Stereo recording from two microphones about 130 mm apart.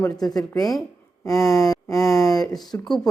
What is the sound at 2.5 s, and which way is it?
Speech, centre (ahead or behind).